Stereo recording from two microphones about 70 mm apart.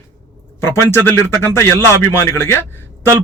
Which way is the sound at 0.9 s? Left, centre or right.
Left.